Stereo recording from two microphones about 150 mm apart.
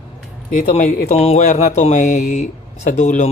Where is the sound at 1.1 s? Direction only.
45° left (ahead or behind).